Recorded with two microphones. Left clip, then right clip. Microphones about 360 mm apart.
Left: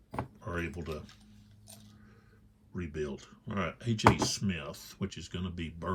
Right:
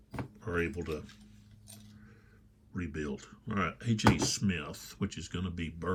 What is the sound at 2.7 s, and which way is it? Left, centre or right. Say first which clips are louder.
Speech: left 1 dB; centre.